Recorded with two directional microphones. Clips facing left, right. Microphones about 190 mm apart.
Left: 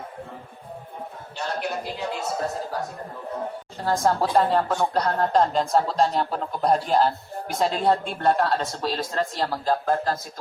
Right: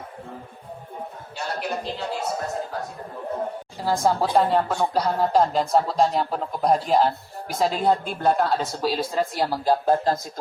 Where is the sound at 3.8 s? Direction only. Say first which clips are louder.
Even; 5° right (ahead or behind).